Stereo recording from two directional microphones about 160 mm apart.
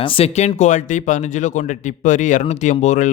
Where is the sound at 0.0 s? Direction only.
40° left (ahead or behind).